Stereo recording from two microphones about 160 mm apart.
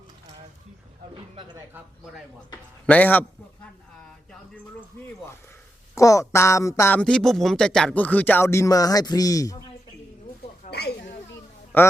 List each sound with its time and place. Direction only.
1.1 s a sound: 30° right (ahead or behind)
2.8 s speech: 10° left (ahead or behind)
6.0 s speech: 20° left (ahead or behind)
7.0 s speech: 5° left (ahead or behind); by 9.6 s 20° left (ahead or behind)
10.7 s snake: 90° left
11.7 s speech: 10° left (ahead or behind)